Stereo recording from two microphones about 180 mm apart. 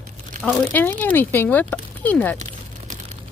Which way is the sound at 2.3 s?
40° right (ahead or behind).